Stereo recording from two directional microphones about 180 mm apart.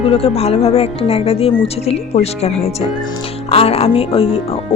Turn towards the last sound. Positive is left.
turn(degrees=30)  # may be behind; listen again after turning